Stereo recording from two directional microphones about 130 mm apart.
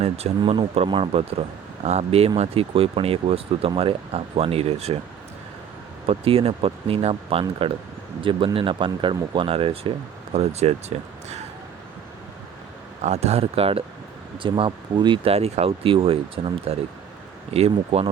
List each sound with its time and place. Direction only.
0.0 s speech: 55° right (ahead or behind)
6.1 s speech: 45° right (ahead or behind)
10.3 s speech: 55° right (ahead or behind)
13.0 s speech: 55° right (ahead or behind)